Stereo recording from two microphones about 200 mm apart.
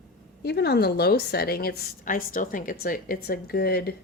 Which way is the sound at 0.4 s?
55° left (ahead or behind).